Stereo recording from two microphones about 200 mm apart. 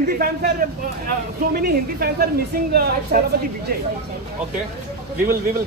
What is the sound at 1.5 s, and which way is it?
Speech, 50° right (ahead or behind).